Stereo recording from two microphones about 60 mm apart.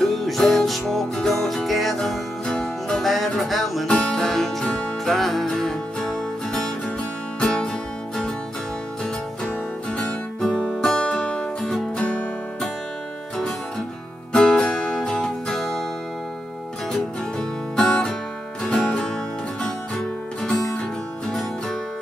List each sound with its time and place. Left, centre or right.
0.0 s music: centre
10.5 s music: centre
14.3 s music: centre
16.9 s music: centre